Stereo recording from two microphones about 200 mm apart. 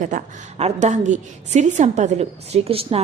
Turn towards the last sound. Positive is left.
turn(degrees=-30)  # may be behind; listen again after turning